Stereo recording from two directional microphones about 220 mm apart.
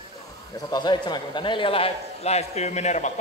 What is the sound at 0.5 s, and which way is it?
A man's voice, 20° left (ahead or behind).